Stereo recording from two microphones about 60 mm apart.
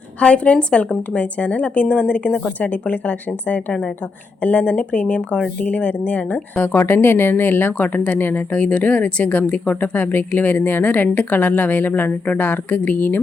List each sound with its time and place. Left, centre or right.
0.2 s speech: centre
6.7 s speech: left